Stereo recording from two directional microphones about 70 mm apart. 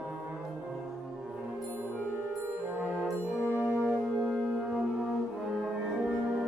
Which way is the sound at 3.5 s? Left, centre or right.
Right.